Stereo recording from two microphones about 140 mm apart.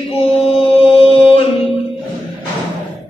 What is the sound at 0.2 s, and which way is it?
Mantra, 40° left (ahead or behind).